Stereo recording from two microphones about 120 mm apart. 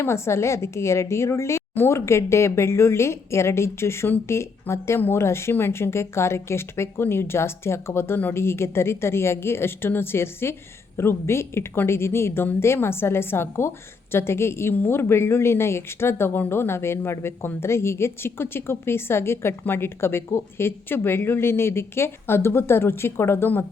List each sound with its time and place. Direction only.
0.0 s a woman's voice: 20° left (ahead or behind)